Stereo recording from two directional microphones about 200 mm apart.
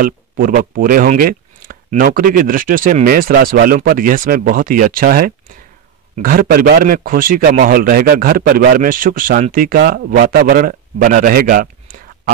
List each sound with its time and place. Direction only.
0.0 s a man's voice: 45° right (ahead or behind)